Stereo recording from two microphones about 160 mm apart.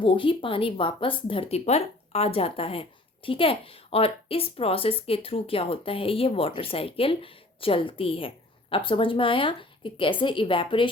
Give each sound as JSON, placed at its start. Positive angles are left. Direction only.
{"t": 0.0, "sound": "a woman's voice", "side_deg": 30}